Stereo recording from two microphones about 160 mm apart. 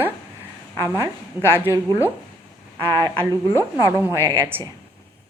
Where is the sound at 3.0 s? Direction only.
25° right (ahead or behind).